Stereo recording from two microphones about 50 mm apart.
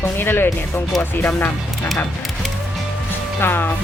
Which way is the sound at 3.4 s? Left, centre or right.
Left.